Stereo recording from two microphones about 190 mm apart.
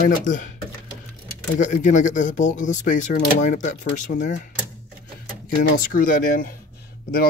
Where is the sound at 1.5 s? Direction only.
40° left (ahead or behind).